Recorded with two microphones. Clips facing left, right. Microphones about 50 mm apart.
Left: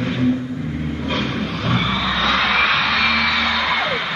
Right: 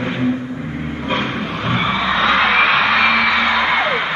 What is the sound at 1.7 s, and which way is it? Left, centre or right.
Music, right.